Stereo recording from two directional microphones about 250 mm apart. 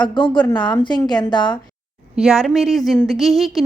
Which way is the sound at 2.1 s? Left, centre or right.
Centre.